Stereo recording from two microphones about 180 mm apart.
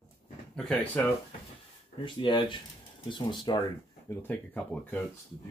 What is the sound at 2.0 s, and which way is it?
Speech, 25° left (ahead or behind).